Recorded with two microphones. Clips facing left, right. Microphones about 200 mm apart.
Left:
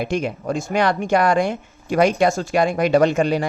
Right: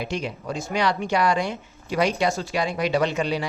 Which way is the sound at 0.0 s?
50° left (ahead or behind).